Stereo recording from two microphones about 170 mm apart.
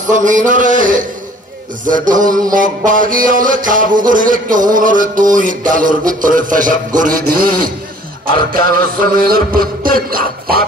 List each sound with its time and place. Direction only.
0.0 s music: 50° right (ahead or behind)
2.2 s music: 20° right (ahead or behind)
2.5 s music: 50° right (ahead or behind)